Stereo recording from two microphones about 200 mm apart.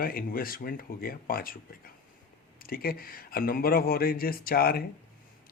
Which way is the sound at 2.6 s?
45° left (ahead or behind).